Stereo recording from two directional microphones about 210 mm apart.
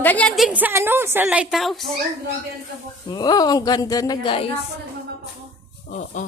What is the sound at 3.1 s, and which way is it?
A woman's voice, 20° left (ahead or behind).